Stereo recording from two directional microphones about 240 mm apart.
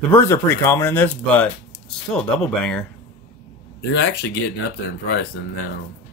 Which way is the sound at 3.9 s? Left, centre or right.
Left.